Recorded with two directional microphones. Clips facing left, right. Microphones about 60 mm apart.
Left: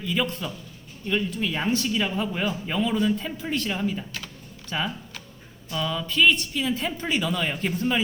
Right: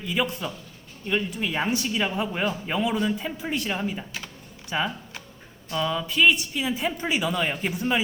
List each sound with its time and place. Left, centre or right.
0.0 s speech: centre